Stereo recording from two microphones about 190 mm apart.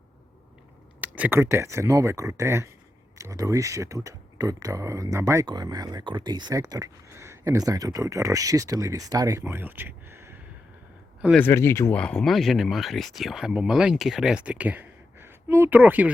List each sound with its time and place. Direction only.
1.0 s speech: 10° right (ahead or behind)
11.3 s speech: 15° left (ahead or behind); by 16.1 s 10° right (ahead or behind)